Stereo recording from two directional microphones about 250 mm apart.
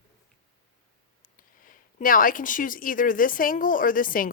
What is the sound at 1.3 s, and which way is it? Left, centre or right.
Speech, left.